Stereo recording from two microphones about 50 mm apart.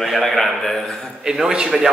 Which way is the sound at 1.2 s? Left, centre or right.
Centre.